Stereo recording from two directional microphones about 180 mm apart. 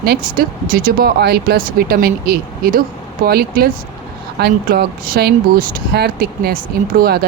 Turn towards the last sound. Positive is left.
turn(degrees=-55)  # may be behind; listen again after turning